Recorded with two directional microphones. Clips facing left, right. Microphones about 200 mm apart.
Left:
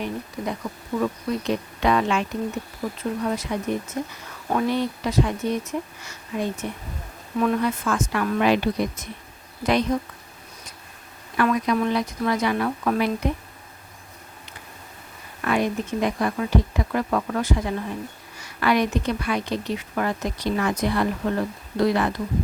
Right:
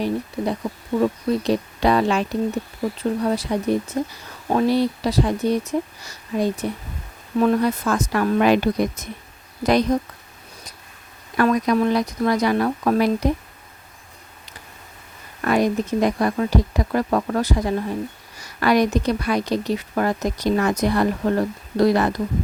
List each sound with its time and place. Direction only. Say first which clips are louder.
0.0 s a woman's voice: right 6 dB; 30° right (ahead or behind)
11.3 s a woman's voice: right 3 dB; 40° right (ahead or behind)
15.4 s a woman's voice: right 4 dB; 40° right (ahead or behind)